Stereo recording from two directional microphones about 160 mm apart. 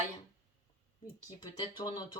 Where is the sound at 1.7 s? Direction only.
25° left (ahead or behind).